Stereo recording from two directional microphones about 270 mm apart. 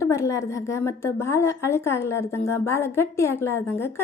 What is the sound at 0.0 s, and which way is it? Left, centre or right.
Speech, centre.